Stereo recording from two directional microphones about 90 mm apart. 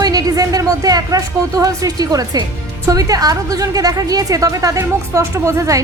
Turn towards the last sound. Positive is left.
turn(degrees=-35)  # may be behind; listen again after turning